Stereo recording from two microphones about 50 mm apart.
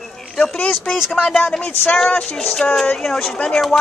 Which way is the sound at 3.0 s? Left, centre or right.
Centre.